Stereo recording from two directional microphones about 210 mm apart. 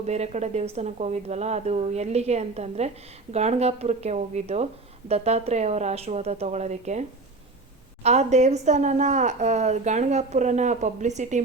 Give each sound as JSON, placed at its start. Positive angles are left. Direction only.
{"t": 0.0, "sound": "speech", "side_deg": -30}
{"t": 8.0, "sound": "speech", "side_deg": -30}